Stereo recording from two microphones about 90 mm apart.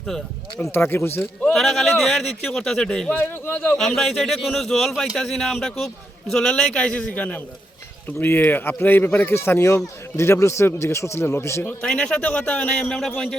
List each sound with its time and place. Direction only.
0.6 s speech: 25° left (ahead or behind)
1.5 s a man's voice: centre (ahead or behind); by 11.7 s 30° left (ahead or behind)
11.8 s a man's voice: 10° left (ahead or behind)